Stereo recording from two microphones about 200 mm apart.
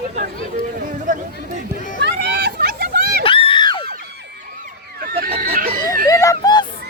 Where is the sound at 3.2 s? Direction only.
25° left (ahead or behind).